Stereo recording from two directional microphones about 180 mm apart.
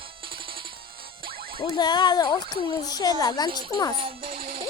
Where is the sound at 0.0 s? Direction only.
30° right (ahead or behind).